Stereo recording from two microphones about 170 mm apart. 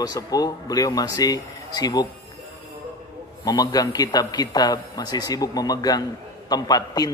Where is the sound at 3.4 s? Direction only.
20° left (ahead or behind).